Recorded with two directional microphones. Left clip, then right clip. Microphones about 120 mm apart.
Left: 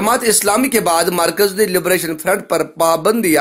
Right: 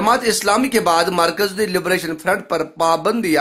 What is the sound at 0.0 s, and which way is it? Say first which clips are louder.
A man's voice: left 1 dB; 15° left (ahead or behind).